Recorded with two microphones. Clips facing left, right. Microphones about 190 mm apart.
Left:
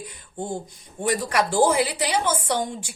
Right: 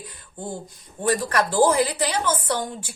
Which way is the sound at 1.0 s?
15° left (ahead or behind).